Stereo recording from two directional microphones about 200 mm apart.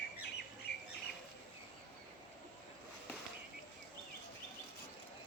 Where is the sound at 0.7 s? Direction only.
60° left (ahead or behind).